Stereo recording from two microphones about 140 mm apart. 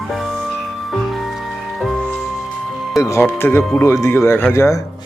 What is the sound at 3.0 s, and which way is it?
Speech, 20° left (ahead or behind).